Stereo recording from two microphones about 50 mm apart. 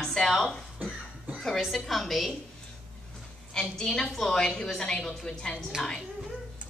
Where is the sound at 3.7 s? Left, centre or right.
Centre.